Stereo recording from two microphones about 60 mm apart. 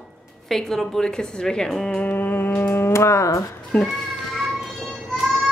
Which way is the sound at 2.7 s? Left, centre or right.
Left.